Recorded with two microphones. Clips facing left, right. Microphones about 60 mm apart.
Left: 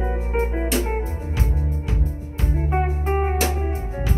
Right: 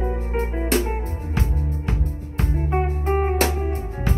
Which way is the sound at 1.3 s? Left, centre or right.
Right.